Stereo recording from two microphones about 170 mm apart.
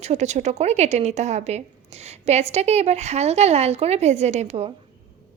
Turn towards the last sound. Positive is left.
turn(degrees=-40)  # may be behind; listen again after turning